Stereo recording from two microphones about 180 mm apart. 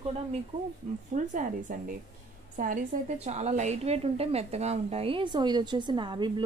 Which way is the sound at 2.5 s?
45° right (ahead or behind).